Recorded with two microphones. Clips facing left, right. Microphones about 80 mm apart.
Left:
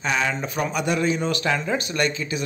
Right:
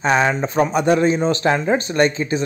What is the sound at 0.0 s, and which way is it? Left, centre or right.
A man's voice, right.